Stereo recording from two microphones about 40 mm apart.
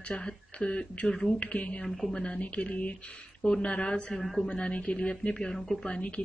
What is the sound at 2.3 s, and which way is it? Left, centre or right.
Speech, left.